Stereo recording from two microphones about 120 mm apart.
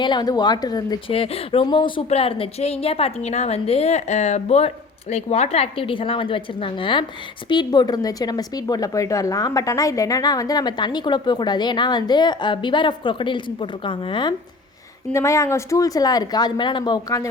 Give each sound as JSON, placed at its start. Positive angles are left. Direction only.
{"t": 0.0, "sound": "speech", "side_deg": 40}
{"t": 1.0, "sound": "speech", "side_deg": 50}
{"t": 1.6, "sound": "speech", "side_deg": 45}
{"t": 2.0, "sound": "a woman's voice", "side_deg": 55}
{"t": 15.1, "sound": "speech", "side_deg": 25}